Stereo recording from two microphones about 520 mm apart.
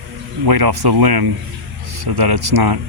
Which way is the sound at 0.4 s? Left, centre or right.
Right.